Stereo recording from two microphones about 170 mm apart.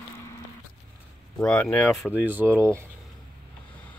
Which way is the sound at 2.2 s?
10° right (ahead or behind).